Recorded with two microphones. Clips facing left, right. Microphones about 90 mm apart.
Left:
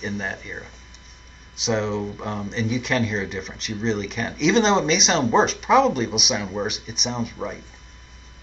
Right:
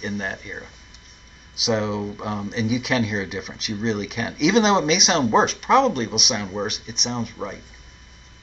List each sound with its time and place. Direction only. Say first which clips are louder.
0.0 s speech: right 1 dB; centre (ahead or behind)